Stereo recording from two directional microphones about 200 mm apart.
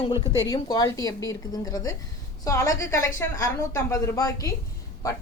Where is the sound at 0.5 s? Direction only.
20° left (ahead or behind).